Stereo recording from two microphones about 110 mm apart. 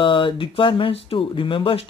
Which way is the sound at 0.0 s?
50° left (ahead or behind).